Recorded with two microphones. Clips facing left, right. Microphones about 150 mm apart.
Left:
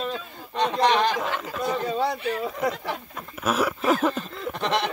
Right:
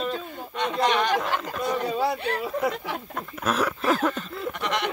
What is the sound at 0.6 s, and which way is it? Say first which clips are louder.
Speech: left 2 dB; 35° left (ahead or behind).